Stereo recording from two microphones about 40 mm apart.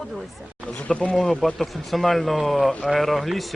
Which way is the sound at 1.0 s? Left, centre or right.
Left.